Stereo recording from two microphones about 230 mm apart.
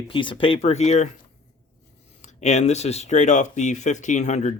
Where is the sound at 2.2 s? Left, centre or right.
Left.